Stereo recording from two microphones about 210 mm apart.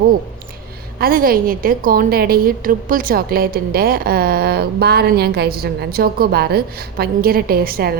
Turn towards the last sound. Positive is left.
turn(degrees=-45)  # may be behind; listen again after turning